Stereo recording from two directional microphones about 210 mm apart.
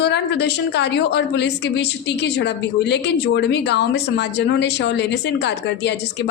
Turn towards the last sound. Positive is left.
turn(degrees=55)  # may be behind; listen again after turning